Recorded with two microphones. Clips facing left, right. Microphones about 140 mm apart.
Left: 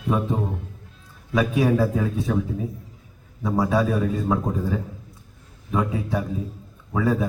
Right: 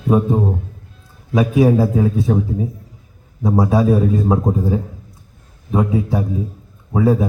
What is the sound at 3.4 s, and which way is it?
Speech, 35° right (ahead or behind).